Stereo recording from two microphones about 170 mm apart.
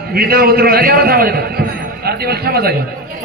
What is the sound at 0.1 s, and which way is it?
A man's voice, 60° right (ahead or behind).